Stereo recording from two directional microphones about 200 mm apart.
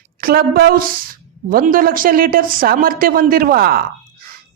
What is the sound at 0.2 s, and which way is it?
A woman's voice, 50° right (ahead or behind).